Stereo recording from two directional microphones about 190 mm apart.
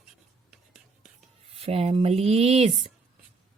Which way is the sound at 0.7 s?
5° right (ahead or behind).